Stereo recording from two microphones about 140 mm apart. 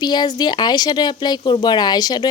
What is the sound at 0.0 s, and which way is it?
Speech, 30° left (ahead or behind).